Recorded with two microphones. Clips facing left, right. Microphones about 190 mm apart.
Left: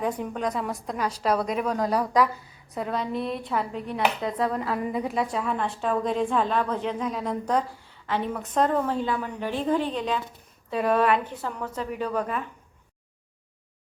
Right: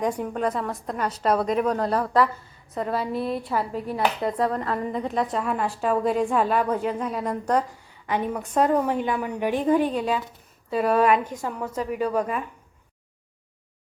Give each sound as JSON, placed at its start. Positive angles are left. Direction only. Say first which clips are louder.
{"t": 0.0, "sound": "speech", "louder": "right 3 dB", "side_deg": -5}
{"t": 2.7, "sound": "a woman's voice", "louder": "right 2 dB", "side_deg": 0}